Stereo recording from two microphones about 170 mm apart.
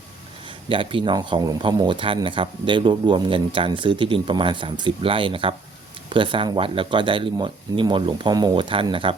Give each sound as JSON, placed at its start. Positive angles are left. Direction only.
{"t": 0.4, "sound": "a man's voice", "side_deg": -30}